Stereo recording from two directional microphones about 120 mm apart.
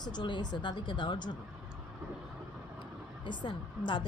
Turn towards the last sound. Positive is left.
turn(degrees=40)  # may be behind; listen again after turning